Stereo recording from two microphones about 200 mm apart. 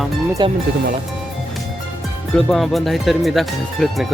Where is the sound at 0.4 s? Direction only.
20° right (ahead or behind).